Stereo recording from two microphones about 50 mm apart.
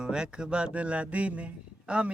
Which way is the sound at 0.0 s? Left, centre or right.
Centre.